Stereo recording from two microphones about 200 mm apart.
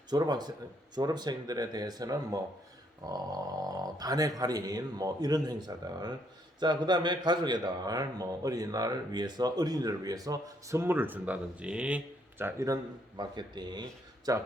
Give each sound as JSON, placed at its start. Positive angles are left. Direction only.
{"t": 0.1, "sound": "speech", "side_deg": -20}